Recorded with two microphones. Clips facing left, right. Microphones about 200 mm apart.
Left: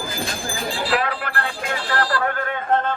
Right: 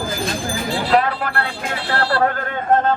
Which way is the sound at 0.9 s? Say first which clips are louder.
Right 7 dB; 40° right (ahead or behind).